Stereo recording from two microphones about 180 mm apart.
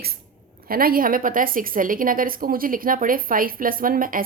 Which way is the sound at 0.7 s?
55° right (ahead or behind).